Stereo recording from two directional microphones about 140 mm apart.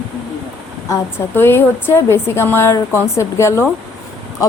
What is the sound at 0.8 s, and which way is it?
A woman's voice, 20° left (ahead or behind).